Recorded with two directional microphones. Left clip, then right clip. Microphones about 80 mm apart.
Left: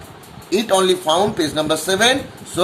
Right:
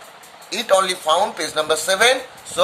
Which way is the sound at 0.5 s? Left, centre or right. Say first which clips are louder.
Left 2 dB; right.